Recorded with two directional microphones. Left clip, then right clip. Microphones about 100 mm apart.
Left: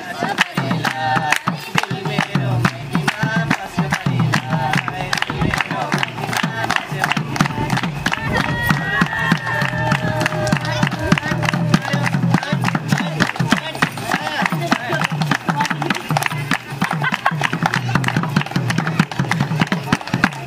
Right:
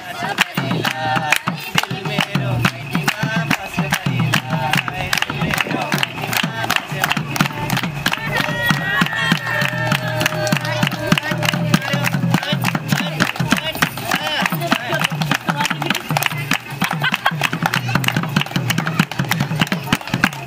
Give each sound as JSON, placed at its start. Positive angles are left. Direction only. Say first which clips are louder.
{"t": 0.2, "sound": "music", "louder": "even", "side_deg": 0}